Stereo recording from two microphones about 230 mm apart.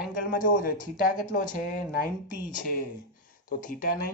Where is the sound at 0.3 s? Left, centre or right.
Left.